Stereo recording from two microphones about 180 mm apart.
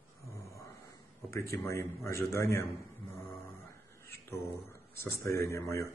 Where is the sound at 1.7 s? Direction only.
15° left (ahead or behind).